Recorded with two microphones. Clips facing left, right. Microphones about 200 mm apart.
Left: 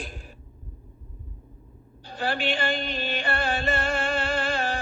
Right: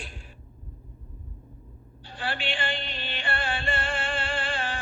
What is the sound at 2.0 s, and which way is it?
Music, 40° left (ahead or behind).